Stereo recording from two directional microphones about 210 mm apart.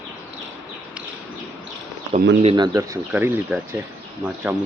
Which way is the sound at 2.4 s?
25° right (ahead or behind).